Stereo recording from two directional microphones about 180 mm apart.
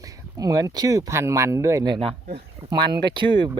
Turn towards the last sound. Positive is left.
turn(degrees=-25)  # may be behind; listen again after turning